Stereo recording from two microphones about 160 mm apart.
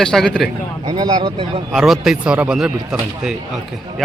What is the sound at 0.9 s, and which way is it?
Speech, 25° right (ahead or behind).